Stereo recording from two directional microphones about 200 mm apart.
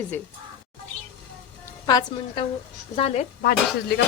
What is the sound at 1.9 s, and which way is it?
A woman's voice, 20° left (ahead or behind).